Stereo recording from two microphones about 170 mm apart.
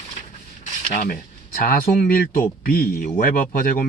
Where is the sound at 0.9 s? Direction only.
55° left (ahead or behind).